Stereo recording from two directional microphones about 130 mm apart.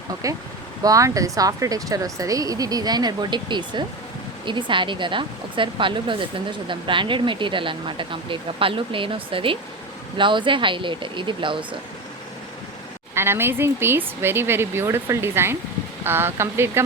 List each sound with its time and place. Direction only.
0.2 s speech: 25° right (ahead or behind)
13.1 s speech: 20° right (ahead or behind)